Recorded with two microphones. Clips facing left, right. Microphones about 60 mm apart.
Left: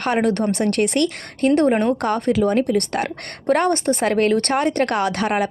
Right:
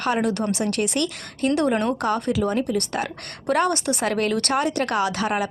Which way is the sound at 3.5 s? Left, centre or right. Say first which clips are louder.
Left 4 dB; left.